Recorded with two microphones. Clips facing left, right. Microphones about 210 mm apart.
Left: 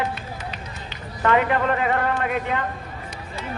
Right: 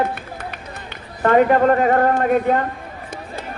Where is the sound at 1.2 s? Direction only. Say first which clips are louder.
Right 6 dB; 40° right (ahead or behind).